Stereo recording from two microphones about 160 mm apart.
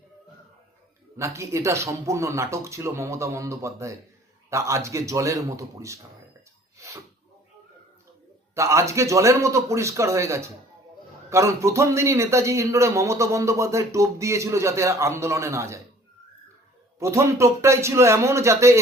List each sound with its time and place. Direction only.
1.1 s a man's voice: 20° right (ahead or behind)
6.7 s a sound: 20° right (ahead or behind)
8.5 s a man's voice: 20° right (ahead or behind)
17.0 s a man's voice: 20° right (ahead or behind)